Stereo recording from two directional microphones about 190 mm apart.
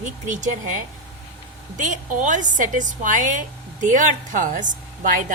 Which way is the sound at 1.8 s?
40° right (ahead or behind).